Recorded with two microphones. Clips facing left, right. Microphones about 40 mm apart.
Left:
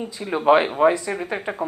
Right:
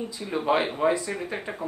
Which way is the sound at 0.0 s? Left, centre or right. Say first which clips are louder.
Left 7 dB; left.